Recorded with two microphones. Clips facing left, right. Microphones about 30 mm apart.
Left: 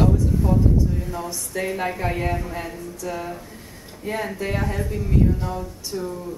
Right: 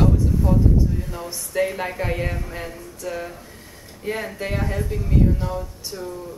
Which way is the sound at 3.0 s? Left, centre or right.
Centre.